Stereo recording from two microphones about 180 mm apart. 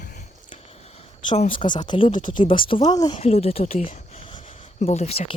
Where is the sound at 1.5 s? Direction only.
25° left (ahead or behind).